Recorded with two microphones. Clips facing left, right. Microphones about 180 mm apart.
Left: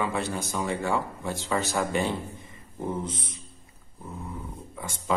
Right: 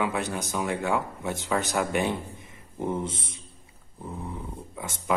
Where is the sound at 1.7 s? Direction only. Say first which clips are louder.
Right 1 dB; 15° right (ahead or behind).